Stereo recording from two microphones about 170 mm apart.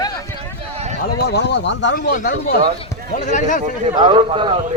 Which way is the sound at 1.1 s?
70° left (ahead or behind).